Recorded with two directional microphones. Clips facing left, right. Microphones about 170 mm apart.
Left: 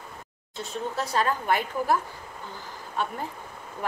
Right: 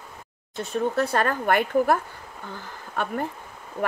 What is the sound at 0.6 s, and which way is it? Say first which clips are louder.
Speech: right 7 dB; 55° right (ahead or behind).